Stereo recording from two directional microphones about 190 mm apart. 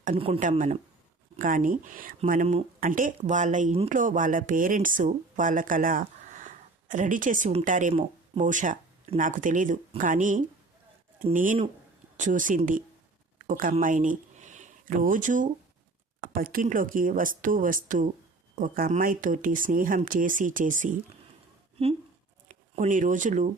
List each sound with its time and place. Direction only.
0.0 s speech: 30° right (ahead or behind)
22.4 s speech: 40° right (ahead or behind)